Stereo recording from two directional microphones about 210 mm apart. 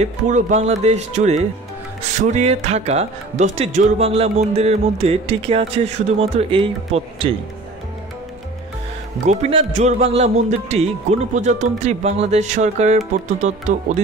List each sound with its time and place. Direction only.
0.0 s speech: 30° right (ahead or behind)
9.2 s speech: 30° right (ahead or behind)